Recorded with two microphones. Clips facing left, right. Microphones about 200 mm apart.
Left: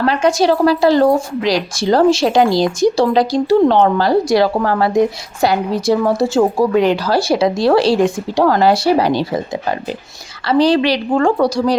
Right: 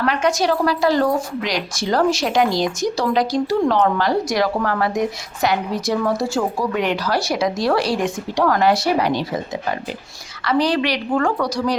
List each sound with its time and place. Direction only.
0.0 s speech: 30° left (ahead or behind)
10.4 s speech: 30° left (ahead or behind)